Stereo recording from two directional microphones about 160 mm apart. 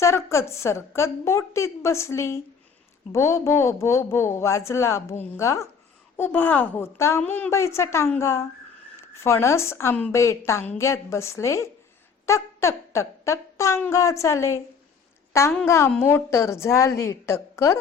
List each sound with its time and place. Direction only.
0.0 s a woman's voice: 15° left (ahead or behind)
12.2 s a sound: 15° left (ahead or behind)
15.3 s a woman's voice: 15° left (ahead or behind)